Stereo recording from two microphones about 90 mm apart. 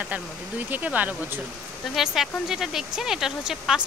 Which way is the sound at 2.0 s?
5° right (ahead or behind).